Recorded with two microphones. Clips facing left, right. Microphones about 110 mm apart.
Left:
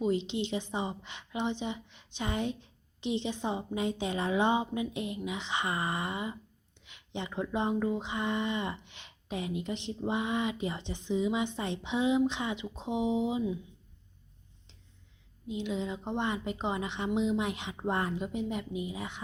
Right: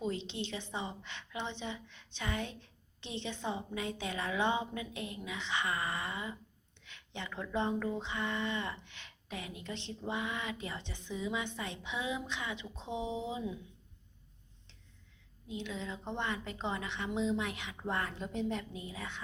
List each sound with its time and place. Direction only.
0.0 s speech: 15° left (ahead or behind)
15.4 s speech: 20° left (ahead or behind)
18.2 s a woman's voice: 10° left (ahead or behind)